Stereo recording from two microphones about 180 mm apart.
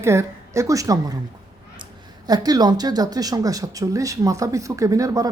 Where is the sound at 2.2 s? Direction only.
20° right (ahead or behind).